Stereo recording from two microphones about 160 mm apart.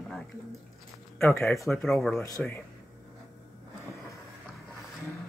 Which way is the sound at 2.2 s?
20° left (ahead or behind).